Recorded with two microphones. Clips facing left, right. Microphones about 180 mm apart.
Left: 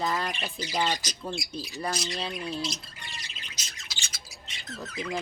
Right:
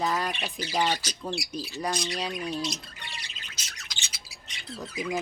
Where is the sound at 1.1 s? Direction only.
5° right (ahead or behind).